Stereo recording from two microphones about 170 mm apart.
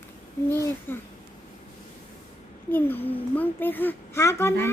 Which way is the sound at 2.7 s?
10° left (ahead or behind).